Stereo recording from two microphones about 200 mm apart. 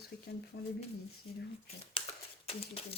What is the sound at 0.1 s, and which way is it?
Speech, 55° left (ahead or behind).